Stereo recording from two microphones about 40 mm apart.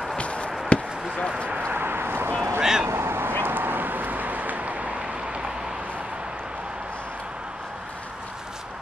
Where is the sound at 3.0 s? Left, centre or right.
Right.